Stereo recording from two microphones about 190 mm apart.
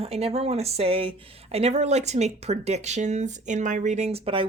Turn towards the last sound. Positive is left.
turn(degrees=-30)  # may be behind; listen again after turning